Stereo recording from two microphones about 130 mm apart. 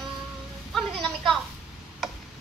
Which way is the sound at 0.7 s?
Centre (ahead or behind).